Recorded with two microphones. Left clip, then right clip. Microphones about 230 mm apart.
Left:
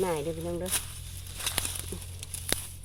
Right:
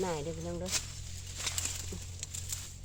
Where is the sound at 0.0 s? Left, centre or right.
Left.